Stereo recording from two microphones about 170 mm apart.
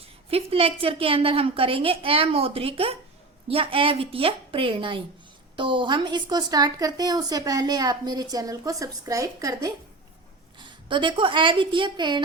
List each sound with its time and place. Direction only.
0.0 s a woman's voice: 35° right (ahead or behind)